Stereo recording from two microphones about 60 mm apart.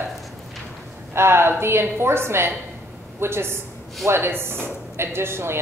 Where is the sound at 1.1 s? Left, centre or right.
Right.